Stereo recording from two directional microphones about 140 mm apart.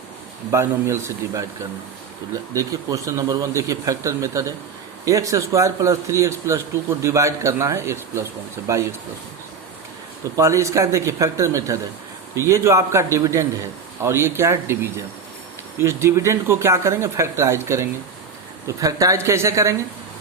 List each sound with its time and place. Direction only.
0.5 s speech: 20° right (ahead or behind)
2.5 s speech: 25° right (ahead or behind)
10.3 s speech: 20° right (ahead or behind)